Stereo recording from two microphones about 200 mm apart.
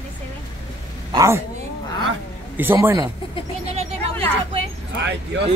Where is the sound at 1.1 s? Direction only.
15° right (ahead or behind).